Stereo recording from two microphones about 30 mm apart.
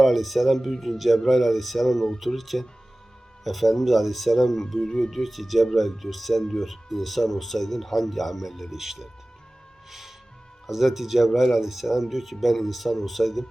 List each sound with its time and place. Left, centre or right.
0.0 s speech: centre
5.1 s speech: centre
6.4 s speech: centre
6.7 s speech: centre
10.7 s speech: centre